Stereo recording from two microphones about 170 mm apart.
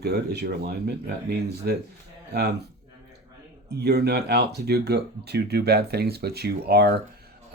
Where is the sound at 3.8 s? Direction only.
70° right (ahead or behind).